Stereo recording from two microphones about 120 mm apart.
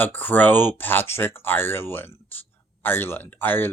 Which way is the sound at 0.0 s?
15° left (ahead or behind).